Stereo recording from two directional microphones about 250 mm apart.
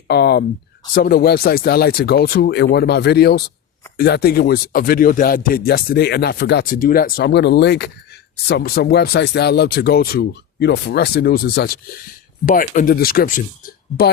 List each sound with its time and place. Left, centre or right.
0.1 s speech: left